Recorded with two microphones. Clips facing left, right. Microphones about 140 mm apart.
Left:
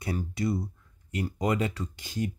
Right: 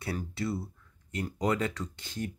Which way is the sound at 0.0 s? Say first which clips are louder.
Left 4 dB; 15° left (ahead or behind).